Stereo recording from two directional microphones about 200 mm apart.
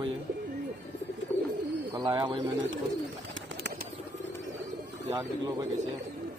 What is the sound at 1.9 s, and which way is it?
Speech, 20° right (ahead or behind).